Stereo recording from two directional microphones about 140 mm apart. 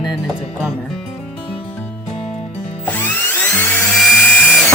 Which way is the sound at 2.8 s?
10° left (ahead or behind).